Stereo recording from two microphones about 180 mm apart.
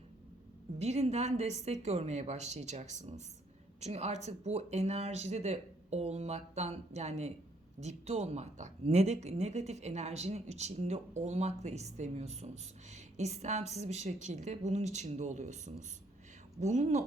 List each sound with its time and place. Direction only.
0.8 s a woman's voice: 35° right (ahead or behind)